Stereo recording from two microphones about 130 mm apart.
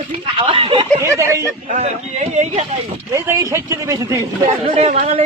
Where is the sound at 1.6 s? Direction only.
65° right (ahead or behind).